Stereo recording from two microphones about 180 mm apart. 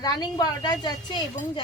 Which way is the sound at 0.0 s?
20° left (ahead or behind).